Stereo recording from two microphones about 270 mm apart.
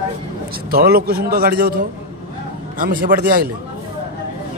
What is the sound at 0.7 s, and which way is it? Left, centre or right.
A man's voice, right.